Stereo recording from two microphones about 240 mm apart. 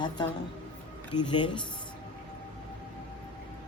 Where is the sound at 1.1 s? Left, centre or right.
Centre.